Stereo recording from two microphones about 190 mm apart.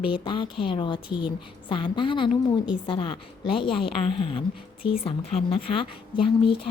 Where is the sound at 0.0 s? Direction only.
25° left (ahead or behind).